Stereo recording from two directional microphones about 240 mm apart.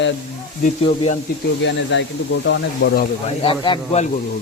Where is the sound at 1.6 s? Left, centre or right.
Left.